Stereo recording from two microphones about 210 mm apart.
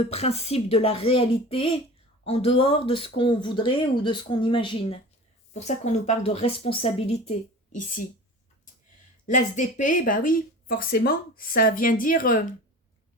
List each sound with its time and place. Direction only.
0.0 s speech: 30° left (ahead or behind)
9.2 s speech: 40° left (ahead or behind)